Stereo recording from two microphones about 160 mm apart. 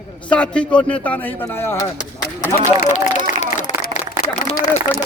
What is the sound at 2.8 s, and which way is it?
Run, 50° left (ahead or behind).